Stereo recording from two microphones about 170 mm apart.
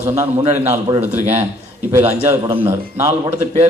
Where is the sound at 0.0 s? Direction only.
15° right (ahead or behind).